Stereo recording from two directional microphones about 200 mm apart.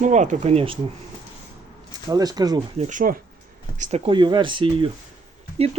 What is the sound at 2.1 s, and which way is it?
Speech, 20° right (ahead or behind).